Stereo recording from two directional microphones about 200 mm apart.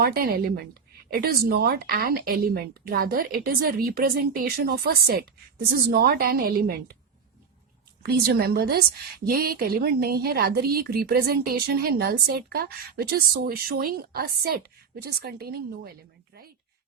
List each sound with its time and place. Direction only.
0.0 s a woman's voice: 50° right (ahead or behind)
8.0 s a woman's voice: 50° right (ahead or behind)